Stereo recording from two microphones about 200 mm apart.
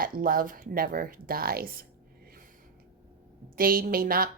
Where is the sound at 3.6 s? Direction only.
45° right (ahead or behind).